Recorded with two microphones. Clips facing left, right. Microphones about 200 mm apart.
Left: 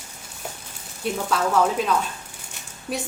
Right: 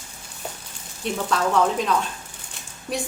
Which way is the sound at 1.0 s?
5° left (ahead or behind).